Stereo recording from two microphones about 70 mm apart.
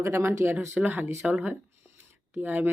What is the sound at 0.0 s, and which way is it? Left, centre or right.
Speech, right.